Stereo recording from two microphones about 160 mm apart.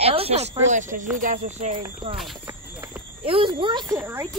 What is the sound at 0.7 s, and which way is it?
Speech, 50° right (ahead or behind).